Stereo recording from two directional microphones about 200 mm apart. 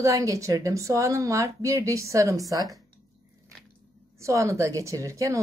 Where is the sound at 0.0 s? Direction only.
15° right (ahead or behind).